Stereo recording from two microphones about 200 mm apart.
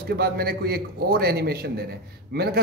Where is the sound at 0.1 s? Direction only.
50° right (ahead or behind).